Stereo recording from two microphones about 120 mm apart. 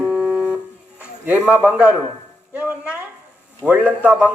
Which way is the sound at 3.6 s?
10° right (ahead or behind).